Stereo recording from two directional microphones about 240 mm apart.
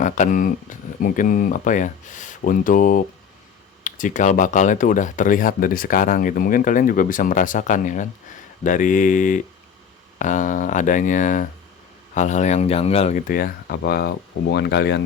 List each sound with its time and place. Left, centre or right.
0.0 s speech: left